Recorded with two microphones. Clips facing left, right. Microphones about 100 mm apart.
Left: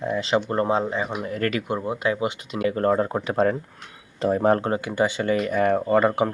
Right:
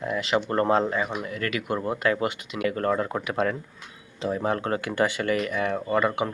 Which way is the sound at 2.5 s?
30° left (ahead or behind).